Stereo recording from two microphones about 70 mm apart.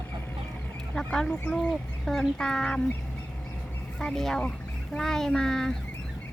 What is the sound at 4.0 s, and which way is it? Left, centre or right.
Speech, centre.